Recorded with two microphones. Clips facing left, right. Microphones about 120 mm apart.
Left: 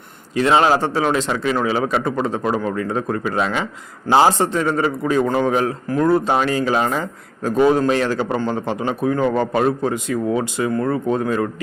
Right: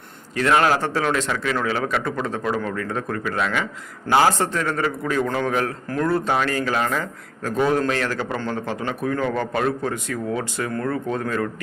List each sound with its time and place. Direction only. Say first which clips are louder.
0.3 s a man's voice: left 3 dB; 20° left (ahead or behind)